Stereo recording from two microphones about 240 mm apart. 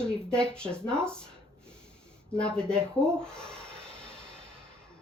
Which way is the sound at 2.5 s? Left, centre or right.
Centre.